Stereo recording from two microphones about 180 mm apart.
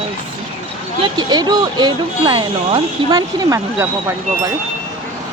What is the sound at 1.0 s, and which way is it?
Speech, 25° right (ahead or behind).